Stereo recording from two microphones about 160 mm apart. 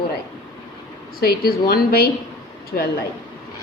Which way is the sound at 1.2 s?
70° left (ahead or behind).